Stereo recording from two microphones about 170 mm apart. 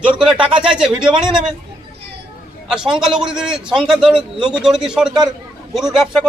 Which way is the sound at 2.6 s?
5° right (ahead or behind).